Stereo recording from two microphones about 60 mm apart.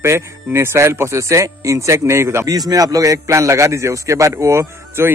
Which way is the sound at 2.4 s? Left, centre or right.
Right.